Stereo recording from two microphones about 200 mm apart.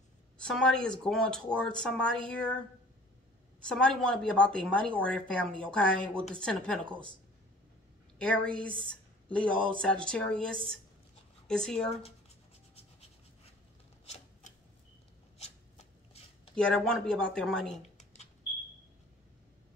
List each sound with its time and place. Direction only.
0.4 s a woman's voice: 5° left (ahead or behind)
3.6 s a woman's voice: 5° left (ahead or behind)
8.2 s a woman's voice: 5° left (ahead or behind)
14.4 s a sound: 40° left (ahead or behind)
15.3 s shuffling cards: 30° left (ahead or behind)
16.5 s a woman's voice: 5° left (ahead or behind)
17.9 s smoke detector: 35° left (ahead or behind)